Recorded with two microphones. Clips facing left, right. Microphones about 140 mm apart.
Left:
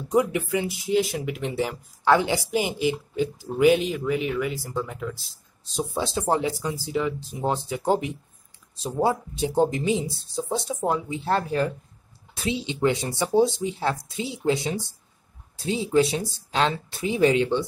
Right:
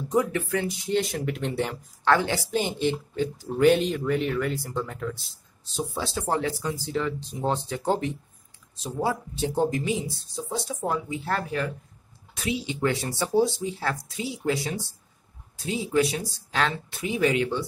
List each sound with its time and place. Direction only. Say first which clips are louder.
0.1 s a woman's voice: left 2 dB; 15° left (ahead or behind)
2.0 s a woman's voice: left 2 dB; 15° left (ahead or behind)
5.8 s speech: left 3 dB; 20° left (ahead or behind)
8.7 s speech: left 4 dB; 30° left (ahead or behind)